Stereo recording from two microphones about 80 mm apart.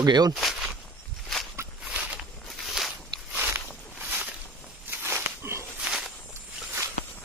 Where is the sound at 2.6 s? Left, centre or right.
Centre.